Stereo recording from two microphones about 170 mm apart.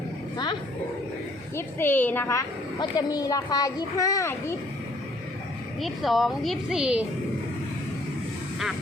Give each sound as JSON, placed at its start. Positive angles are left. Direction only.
{"t": 1.5, "sound": "a woman's voice", "side_deg": 10}
{"t": 5.8, "sound": "a woman's voice", "side_deg": 0}